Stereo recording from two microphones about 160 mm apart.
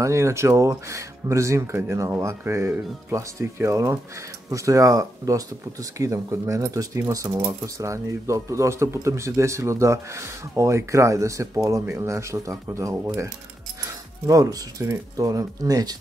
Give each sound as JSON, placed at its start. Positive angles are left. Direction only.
{"t": 0.0, "sound": "speech", "side_deg": -20}